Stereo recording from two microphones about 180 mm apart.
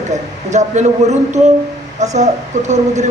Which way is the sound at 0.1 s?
40° right (ahead or behind).